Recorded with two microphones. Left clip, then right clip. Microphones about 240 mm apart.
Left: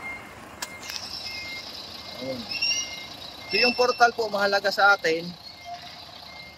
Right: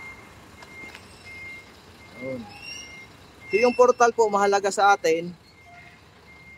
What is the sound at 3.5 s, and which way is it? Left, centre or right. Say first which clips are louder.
Speech: right 4 dB; centre.